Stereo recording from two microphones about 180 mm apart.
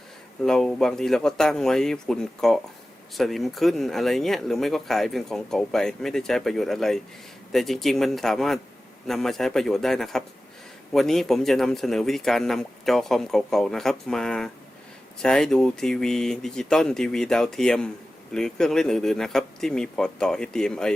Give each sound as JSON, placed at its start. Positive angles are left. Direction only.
{"t": 0.4, "sound": "speech", "side_deg": 0}